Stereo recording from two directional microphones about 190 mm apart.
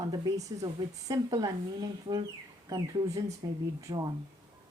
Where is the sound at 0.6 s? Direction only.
15° right (ahead or behind).